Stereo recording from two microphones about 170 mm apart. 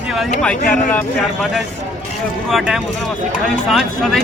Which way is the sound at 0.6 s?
50° left (ahead or behind).